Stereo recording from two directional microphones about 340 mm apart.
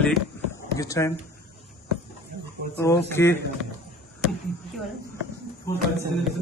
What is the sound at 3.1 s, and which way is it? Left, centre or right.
Speech, centre.